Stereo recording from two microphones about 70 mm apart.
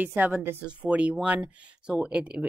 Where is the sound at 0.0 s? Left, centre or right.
Right.